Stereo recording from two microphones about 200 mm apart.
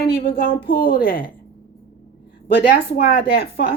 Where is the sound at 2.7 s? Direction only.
50° left (ahead or behind).